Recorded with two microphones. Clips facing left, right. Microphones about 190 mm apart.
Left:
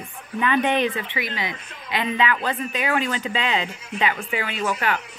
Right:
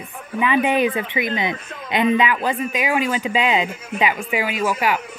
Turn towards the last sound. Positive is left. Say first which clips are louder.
# right 4 dB
turn(degrees=-10)  # may be behind; listen again after turning